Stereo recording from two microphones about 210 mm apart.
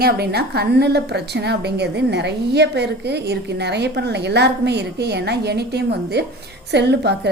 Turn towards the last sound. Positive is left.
turn(degrees=-55)  # may be behind; listen again after turning